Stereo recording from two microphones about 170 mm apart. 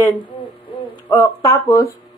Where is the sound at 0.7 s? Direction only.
30° left (ahead or behind).